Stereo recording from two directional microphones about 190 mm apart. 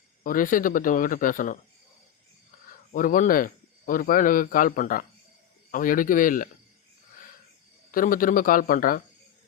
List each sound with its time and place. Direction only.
0.2 s a man's voice: 45° left (ahead or behind)
2.9 s a man's voice: 45° left (ahead or behind)
7.9 s a man's voice: 45° left (ahead or behind)